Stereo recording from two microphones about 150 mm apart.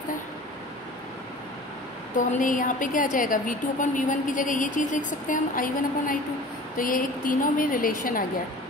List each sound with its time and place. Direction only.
2.1 s a woman's voice: 60° left (ahead or behind)